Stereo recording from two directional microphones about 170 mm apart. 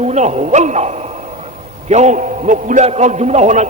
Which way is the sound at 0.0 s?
40° right (ahead or behind).